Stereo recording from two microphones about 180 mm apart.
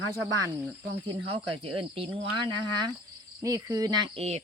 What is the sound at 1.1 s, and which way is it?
Speech, 30° right (ahead or behind).